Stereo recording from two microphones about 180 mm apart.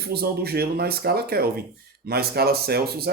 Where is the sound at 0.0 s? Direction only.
60° right (ahead or behind).